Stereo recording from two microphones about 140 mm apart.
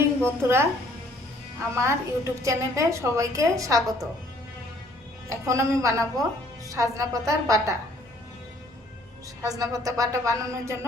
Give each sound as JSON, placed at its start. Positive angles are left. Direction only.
{"t": 0.2, "sound": "a woman's voice", "side_deg": -15}
{"t": 1.7, "sound": "a woman's voice", "side_deg": -20}
{"t": 5.3, "sound": "a woman's voice", "side_deg": -20}
{"t": 9.4, "sound": "a woman's voice", "side_deg": -25}